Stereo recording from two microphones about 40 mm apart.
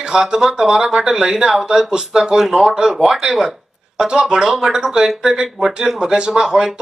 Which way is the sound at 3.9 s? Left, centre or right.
Centre.